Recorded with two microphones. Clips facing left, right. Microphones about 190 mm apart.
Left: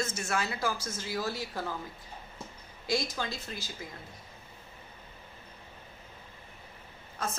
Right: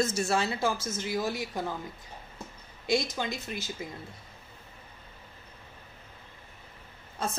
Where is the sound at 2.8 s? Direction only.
20° right (ahead or behind).